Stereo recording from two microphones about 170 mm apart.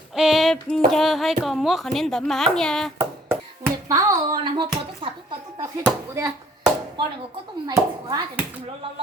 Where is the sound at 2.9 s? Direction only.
15° right (ahead or behind).